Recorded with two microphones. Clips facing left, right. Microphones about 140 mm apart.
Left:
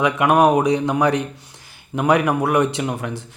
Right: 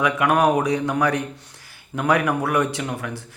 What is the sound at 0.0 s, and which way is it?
A man's voice, 20° left (ahead or behind).